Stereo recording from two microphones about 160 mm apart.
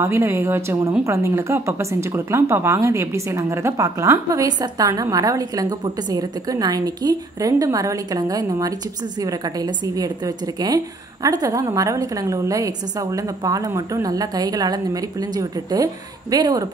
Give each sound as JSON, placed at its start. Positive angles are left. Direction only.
{"t": 0.0, "sound": "speech", "side_deg": -15}